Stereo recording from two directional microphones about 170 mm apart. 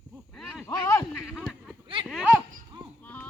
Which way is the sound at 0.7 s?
15° left (ahead or behind).